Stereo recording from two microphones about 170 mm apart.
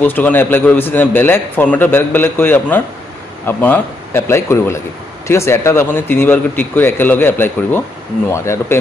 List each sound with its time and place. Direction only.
0.0 s a man's voice: 10° left (ahead or behind)